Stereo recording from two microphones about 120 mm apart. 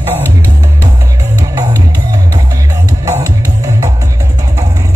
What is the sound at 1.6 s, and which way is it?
Music, 25° right (ahead or behind).